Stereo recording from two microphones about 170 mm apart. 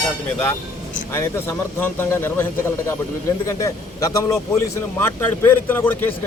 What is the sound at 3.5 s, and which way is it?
A man's voice, 20° left (ahead or behind).